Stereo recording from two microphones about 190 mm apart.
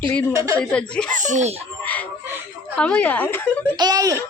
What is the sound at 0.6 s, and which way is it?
Speech, 5° left (ahead or behind).